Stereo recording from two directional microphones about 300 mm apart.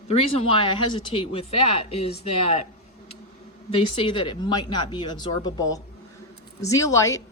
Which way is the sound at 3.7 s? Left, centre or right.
Centre.